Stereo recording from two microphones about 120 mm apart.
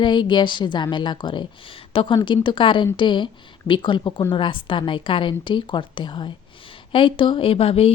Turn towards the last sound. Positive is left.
turn(degrees=55)  # may be behind; listen again after turning